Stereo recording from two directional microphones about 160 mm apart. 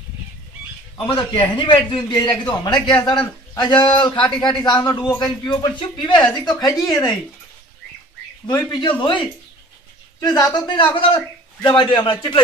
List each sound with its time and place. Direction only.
0.9 s a man's voice: 35° left (ahead or behind)
8.5 s speech: 25° left (ahead or behind)
10.2 s a man's voice: 25° left (ahead or behind)